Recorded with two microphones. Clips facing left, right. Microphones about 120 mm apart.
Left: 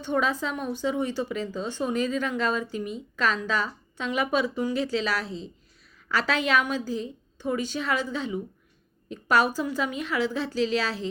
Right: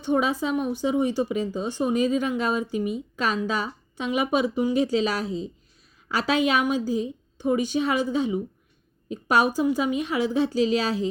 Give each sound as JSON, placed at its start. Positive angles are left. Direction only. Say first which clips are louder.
{"t": 0.0, "sound": "a woman's voice", "louder": "right 3 dB", "side_deg": -15}